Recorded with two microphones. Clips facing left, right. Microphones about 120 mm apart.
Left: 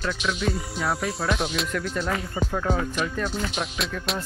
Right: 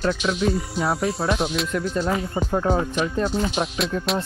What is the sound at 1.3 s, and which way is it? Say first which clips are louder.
Speech: right 3 dB; centre (ahead or behind).